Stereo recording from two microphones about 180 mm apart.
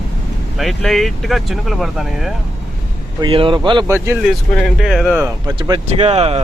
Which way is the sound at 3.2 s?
30° right (ahead or behind).